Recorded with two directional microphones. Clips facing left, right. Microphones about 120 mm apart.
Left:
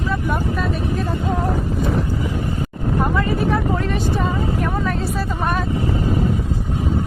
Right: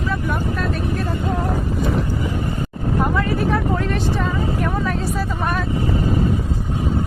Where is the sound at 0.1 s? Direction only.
Centre (ahead or behind).